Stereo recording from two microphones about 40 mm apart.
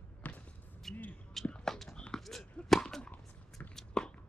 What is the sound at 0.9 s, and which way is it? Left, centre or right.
Basketball bounce, centre.